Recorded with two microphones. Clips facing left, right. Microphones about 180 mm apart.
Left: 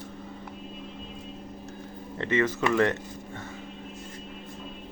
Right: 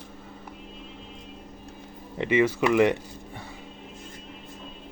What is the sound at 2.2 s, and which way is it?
Speech, 10° right (ahead or behind).